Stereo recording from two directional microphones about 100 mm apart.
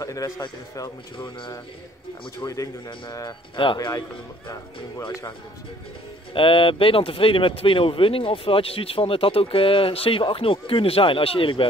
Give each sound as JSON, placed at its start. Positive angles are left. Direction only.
{"t": 0.0, "sound": "a man's voice", "side_deg": 35}
{"t": 1.1, "sound": "speech", "side_deg": 55}
{"t": 2.4, "sound": "a man's voice", "side_deg": 35}
{"t": 6.3, "sound": "speech", "side_deg": 60}